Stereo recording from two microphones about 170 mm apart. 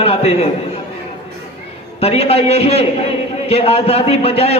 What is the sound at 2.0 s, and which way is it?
A man's voice, 35° left (ahead or behind).